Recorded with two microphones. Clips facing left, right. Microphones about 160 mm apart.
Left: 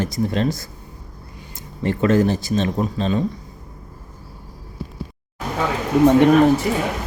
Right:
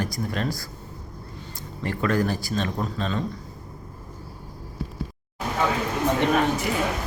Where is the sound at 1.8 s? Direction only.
25° left (ahead or behind).